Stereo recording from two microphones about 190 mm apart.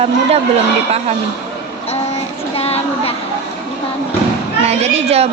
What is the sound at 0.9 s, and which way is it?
Speech, 35° right (ahead or behind).